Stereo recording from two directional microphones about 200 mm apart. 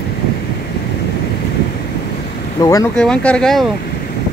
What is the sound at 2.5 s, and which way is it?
Speech, 15° left (ahead or behind).